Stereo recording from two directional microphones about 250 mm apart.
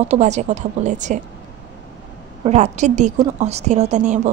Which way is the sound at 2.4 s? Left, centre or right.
Right.